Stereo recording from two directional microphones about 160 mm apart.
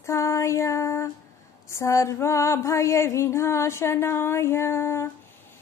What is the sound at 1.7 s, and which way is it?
Female singing, 20° left (ahead or behind).